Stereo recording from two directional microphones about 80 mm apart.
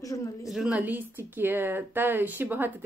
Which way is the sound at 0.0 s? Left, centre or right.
Left.